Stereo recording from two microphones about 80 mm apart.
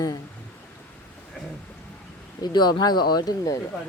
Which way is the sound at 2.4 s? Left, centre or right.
Left.